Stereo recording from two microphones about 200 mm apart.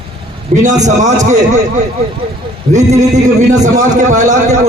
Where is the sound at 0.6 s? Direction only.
35° right (ahead or behind).